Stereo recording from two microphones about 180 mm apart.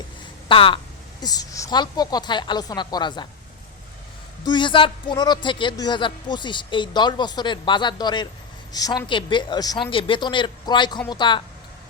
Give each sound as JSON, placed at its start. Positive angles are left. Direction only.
{"t": 0.4, "sound": "speech", "side_deg": 30}
{"t": 4.4, "sound": "speech", "side_deg": 25}